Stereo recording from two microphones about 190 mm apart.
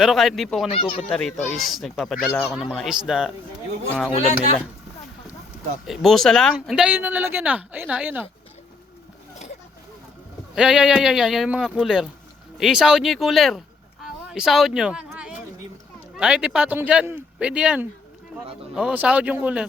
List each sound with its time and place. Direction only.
0.0 s speech: centre (ahead or behind)
0.7 s speech: 30° left (ahead or behind)
1.1 s speech: 5° left (ahead or behind)
5.9 s speech: centre (ahead or behind)
10.5 s speech: 5° right (ahead or behind)
14.0 s a sound: 5° right (ahead or behind)
16.1 s speech: 5° right (ahead or behind)